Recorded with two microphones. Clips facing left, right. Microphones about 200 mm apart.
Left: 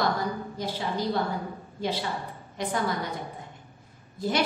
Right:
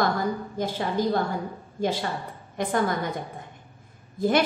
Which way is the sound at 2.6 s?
50° right (ahead or behind).